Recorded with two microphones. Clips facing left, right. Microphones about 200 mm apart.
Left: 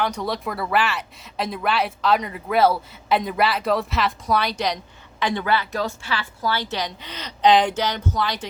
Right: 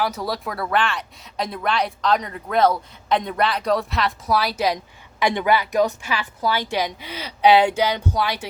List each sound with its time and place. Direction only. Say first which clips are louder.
0.0 s a woman's voice: even; 5° right (ahead or behind)